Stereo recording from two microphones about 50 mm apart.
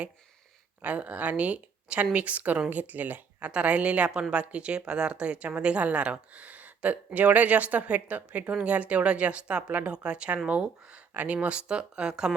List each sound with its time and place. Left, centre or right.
0.8 s a woman's voice: right
11.1 s speech: right
11.3 s a woman's voice: right